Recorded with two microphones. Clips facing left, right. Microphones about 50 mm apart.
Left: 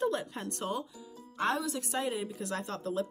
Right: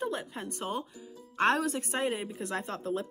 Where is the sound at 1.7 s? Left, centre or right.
Right.